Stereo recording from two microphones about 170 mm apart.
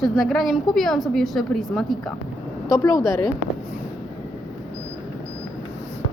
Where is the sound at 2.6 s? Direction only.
20° left (ahead or behind).